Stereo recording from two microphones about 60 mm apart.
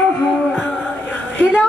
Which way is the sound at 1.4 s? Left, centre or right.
Left.